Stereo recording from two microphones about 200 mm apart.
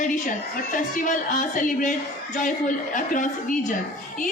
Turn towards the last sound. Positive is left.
turn(degrees=40)  # may be behind; listen again after turning